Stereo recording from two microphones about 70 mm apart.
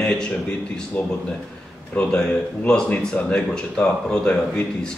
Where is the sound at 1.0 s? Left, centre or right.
Left.